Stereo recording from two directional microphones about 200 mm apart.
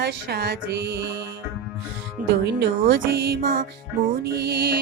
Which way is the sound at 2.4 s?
55° right (ahead or behind).